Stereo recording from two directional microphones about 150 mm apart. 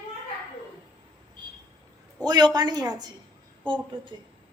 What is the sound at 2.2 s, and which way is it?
A woman's voice, 30° right (ahead or behind).